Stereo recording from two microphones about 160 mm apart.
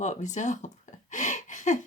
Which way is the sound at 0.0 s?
50° left (ahead or behind).